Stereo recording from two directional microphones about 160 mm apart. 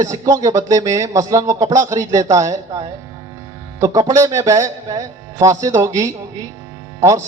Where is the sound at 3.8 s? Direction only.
20° right (ahead or behind).